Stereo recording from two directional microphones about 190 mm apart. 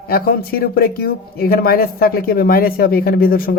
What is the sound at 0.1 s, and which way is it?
Speech, 55° left (ahead or behind).